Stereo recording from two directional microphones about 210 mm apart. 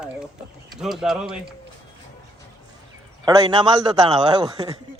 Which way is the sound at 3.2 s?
20° right (ahead or behind).